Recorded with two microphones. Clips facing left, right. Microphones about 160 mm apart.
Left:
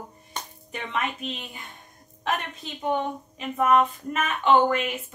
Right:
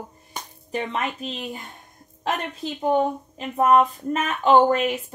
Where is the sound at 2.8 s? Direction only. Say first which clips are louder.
Right 5 dB; 35° right (ahead or behind).